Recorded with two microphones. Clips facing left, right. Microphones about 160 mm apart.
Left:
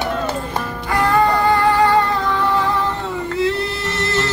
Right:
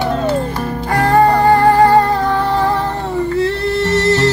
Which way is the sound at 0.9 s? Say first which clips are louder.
Right 4 dB; 40° right (ahead or behind).